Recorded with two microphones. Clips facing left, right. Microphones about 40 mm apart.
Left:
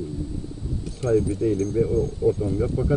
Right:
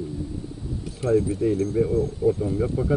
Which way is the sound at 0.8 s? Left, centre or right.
Centre.